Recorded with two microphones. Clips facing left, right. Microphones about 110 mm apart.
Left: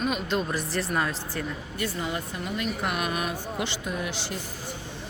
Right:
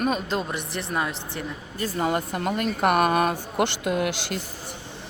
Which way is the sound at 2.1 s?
60° right (ahead or behind).